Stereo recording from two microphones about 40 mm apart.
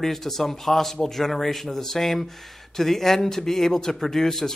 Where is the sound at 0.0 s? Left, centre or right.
Centre.